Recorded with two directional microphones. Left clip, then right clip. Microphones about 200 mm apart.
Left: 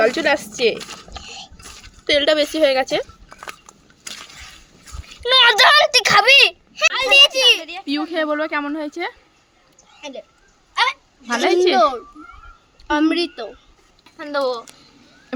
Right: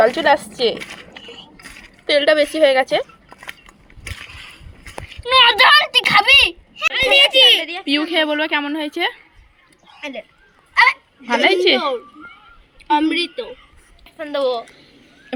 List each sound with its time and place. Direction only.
0.0 s speech: 10° left (ahead or behind)
2.0 s a woman's voice: 5° left (ahead or behind)
5.0 s speech: 55° left (ahead or behind); by 7.9 s 40° left (ahead or behind)
7.9 s a woman's voice: centre (ahead or behind)
11.3 s a woman's voice: 10° right (ahead or behind)
13.1 s a woman's voice: 25° left (ahead or behind)
15.3 s speech: centre (ahead or behind)